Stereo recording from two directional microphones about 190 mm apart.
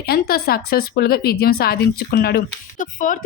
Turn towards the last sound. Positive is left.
turn(degrees=45)  # may be behind; listen again after turning